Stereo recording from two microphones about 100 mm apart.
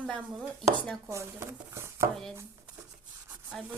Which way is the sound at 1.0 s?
25° right (ahead or behind).